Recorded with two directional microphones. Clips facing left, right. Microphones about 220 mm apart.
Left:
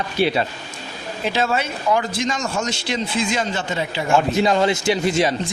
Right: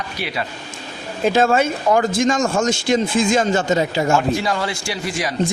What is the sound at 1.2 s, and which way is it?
A man's voice, 50° right (ahead or behind).